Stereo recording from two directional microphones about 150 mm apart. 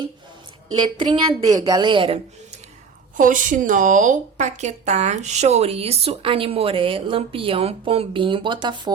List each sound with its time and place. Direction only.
0.7 s a woman's voice: 30° right (ahead or behind)
3.2 s a woman's voice: 60° right (ahead or behind); by 8.9 s 30° right (ahead or behind)